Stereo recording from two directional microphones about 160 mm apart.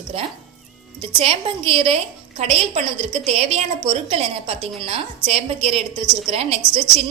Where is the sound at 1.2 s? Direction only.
35° right (ahead or behind).